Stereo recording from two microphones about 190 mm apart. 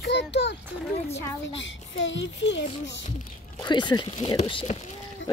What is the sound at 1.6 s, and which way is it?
A child's voice, 75° left (ahead or behind).